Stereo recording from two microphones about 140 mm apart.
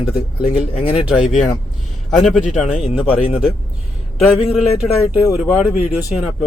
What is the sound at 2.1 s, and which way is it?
Speech, centre (ahead or behind).